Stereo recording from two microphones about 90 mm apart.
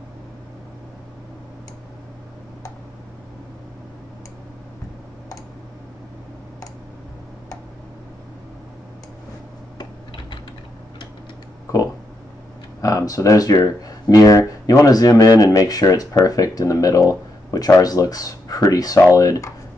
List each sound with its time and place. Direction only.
12.8 s speech: 40° left (ahead or behind)